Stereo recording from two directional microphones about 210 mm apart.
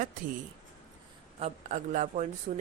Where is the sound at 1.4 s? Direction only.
35° right (ahead or behind).